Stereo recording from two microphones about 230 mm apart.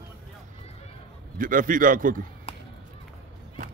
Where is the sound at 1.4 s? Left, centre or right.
Right.